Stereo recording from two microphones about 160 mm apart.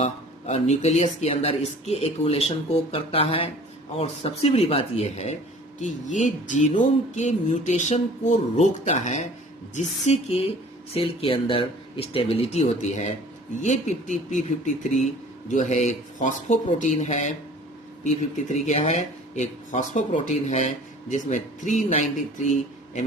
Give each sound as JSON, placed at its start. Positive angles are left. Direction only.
{"t": 0.0, "sound": "speech", "side_deg": 45}